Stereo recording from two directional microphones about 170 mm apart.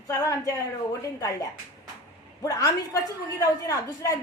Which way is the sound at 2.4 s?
20° left (ahead or behind).